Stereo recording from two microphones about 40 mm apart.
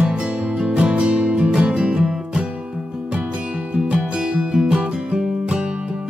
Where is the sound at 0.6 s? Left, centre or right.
Right.